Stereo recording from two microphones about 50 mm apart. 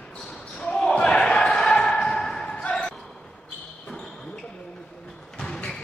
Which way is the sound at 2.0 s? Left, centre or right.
Centre.